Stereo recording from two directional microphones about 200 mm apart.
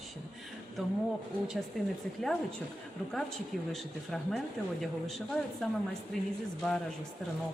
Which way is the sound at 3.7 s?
Centre (ahead or behind).